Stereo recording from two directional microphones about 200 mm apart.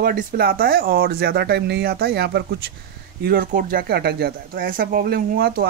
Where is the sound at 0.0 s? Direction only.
45° right (ahead or behind).